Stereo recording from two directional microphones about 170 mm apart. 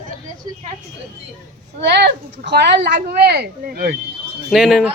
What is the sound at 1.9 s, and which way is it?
Speech, 80° right.